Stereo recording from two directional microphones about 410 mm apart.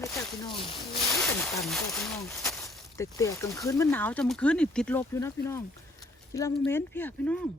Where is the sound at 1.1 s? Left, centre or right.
Centre.